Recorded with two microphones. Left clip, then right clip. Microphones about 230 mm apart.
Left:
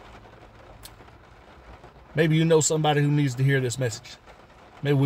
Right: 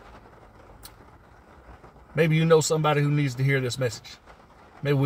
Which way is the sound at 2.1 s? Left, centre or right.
Centre.